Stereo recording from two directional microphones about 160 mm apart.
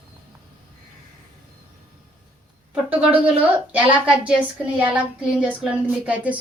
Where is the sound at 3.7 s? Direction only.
10° right (ahead or behind).